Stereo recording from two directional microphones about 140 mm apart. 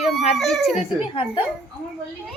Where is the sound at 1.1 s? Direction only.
40° left (ahead or behind).